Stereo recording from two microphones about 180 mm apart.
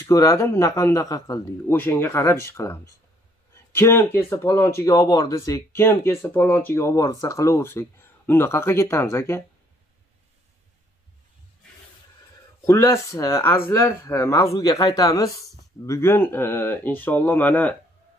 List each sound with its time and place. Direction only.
0.0 s speech: 15° left (ahead or behind)
12.6 s speech: 15° left (ahead or behind)